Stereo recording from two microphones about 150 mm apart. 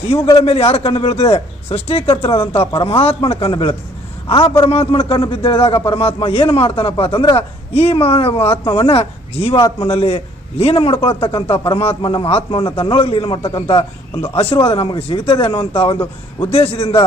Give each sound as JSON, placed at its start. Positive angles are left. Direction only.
{"t": 0.1, "sound": "a man's voice", "side_deg": 45}